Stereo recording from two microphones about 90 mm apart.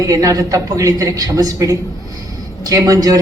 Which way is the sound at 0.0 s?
40° right (ahead or behind).